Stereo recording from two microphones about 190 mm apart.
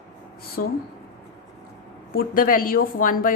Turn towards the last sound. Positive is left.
turn(degrees=45)  # may be behind; listen again after turning